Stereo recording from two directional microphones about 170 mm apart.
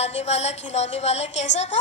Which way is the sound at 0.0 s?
40° left (ahead or behind).